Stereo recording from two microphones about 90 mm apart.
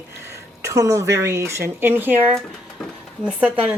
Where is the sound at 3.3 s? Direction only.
15° right (ahead or behind).